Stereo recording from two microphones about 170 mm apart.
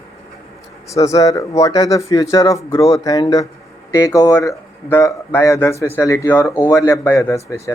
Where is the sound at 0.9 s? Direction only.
20° left (ahead or behind).